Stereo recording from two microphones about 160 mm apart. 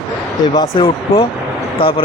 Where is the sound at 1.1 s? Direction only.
35° left (ahead or behind).